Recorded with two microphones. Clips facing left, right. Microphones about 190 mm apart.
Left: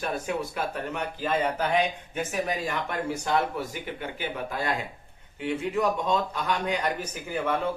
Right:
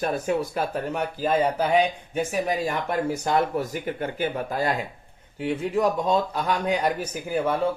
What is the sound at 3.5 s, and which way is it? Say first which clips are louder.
Speech: right 6 dB; 45° right (ahead or behind).